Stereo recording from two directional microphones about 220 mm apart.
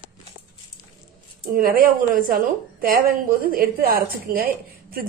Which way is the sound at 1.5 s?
40° right (ahead or behind).